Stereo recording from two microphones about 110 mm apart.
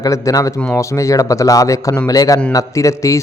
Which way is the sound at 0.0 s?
30° left (ahead or behind).